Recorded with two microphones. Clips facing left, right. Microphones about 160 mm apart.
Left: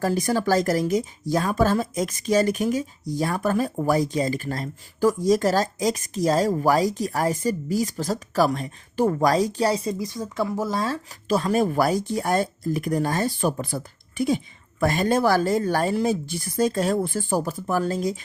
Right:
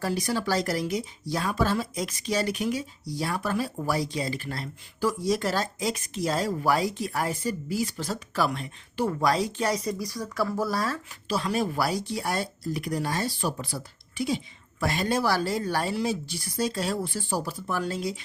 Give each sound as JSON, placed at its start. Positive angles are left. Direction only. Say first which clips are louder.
{"t": 0.0, "sound": "speech", "louder": "left 5 dB", "side_deg": 45}
{"t": 11.3, "sound": "speech", "louder": "left 6 dB", "side_deg": 45}